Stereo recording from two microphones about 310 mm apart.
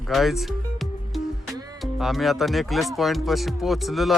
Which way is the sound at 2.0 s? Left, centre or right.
Centre.